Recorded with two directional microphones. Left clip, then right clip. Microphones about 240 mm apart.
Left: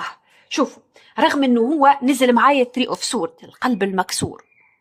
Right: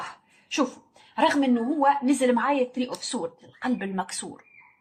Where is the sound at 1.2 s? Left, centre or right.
Left.